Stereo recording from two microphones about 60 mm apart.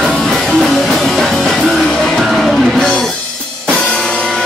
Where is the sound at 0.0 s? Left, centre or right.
Centre.